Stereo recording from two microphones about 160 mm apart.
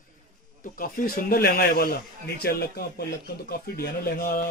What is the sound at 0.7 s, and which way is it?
Speech, 60° left (ahead or behind).